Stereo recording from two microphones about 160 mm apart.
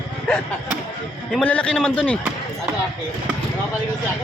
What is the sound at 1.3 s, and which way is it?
Speech, 5° left (ahead or behind).